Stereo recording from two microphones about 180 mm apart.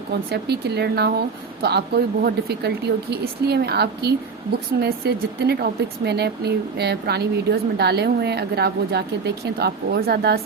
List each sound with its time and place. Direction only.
0.1 s a woman's voice: 65° right (ahead or behind)